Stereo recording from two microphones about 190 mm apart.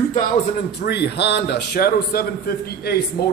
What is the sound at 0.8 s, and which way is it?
Speech, 60° left (ahead or behind).